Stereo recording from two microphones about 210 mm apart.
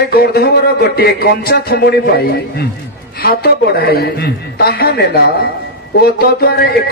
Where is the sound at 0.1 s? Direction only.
45° left (ahead or behind).